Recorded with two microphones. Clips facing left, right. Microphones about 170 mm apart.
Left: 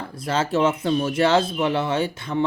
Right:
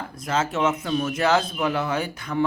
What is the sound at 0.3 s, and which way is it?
Speech, 30° left (ahead or behind).